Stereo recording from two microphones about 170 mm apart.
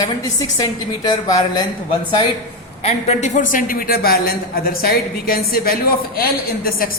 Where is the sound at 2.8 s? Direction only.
40° left (ahead or behind).